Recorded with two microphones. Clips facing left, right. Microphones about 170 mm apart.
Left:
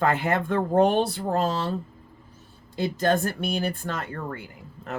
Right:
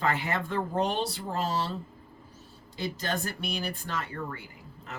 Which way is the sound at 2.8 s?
50° left (ahead or behind).